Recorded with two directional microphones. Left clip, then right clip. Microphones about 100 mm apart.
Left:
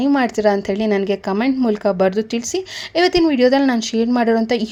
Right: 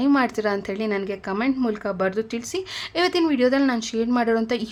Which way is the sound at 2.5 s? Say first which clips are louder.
Left 5 dB; 40° left (ahead or behind).